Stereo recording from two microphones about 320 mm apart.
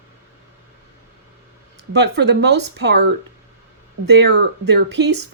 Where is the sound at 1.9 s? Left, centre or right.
Right.